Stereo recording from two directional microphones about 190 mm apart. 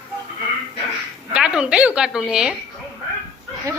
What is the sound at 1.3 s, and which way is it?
A woman's voice, 5° right (ahead or behind).